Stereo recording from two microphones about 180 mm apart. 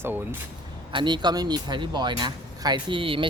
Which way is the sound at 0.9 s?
25° right (ahead or behind).